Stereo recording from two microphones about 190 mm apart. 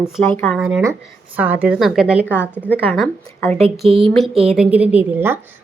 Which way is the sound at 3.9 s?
30° right (ahead or behind).